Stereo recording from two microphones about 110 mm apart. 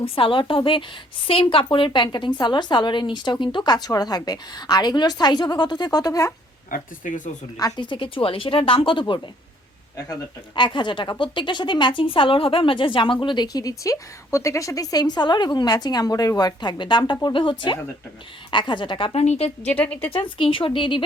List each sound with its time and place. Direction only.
0.0 s speech: 50° left (ahead or behind); by 6.3 s 35° left (ahead or behind)
7.5 s speech: 40° left (ahead or behind)
19.2 s a woman's voice: 85° left
19.6 s a woman's voice: 15° left (ahead or behind)
20.1 s speech: 55° left (ahead or behind)